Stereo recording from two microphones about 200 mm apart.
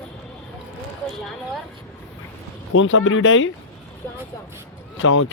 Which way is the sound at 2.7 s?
75° left (ahead or behind).